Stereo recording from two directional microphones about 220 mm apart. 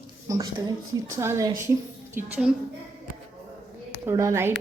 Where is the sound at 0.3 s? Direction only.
15° right (ahead or behind).